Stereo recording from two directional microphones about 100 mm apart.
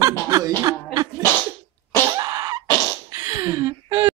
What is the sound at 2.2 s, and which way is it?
Cough, 40° right (ahead or behind).